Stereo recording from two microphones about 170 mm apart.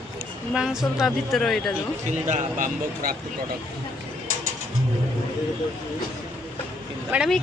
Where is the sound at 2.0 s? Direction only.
45° right (ahead or behind).